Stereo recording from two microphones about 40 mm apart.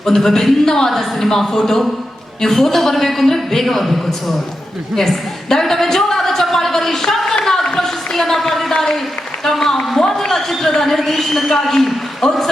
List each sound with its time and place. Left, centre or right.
0.0 s a woman's voice: centre
4.9 s a sound: centre
8.7 s applause: centre
9.4 s a man's voice: centre